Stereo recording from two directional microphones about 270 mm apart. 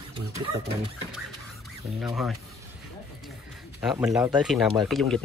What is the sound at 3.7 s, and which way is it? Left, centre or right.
Speech, centre.